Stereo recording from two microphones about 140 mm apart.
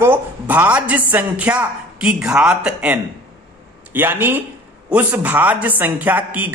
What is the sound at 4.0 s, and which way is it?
A man's voice, 15° right (ahead or behind).